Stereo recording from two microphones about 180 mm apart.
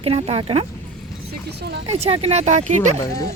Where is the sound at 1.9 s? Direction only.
35° right (ahead or behind).